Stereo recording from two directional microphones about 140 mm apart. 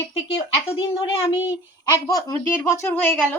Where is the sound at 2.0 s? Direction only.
25° left (ahead or behind).